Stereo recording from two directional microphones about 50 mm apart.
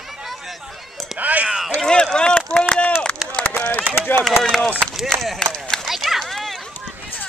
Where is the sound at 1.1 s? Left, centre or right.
Right.